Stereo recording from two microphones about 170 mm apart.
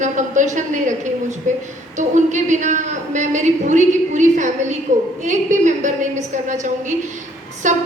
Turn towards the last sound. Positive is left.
turn(degrees=-45)  # may be behind; listen again after turning